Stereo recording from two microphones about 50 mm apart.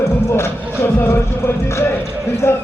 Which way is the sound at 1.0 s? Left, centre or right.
Left.